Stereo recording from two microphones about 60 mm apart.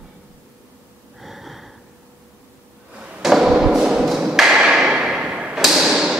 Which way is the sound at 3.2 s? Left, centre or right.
Centre.